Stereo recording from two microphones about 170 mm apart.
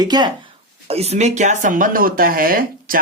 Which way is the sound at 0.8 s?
40° right (ahead or behind).